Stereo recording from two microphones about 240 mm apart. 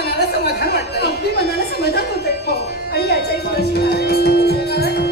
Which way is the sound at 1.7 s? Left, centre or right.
Left.